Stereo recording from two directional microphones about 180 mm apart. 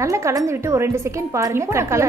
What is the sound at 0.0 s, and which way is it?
A woman's voice, 15° right (ahead or behind).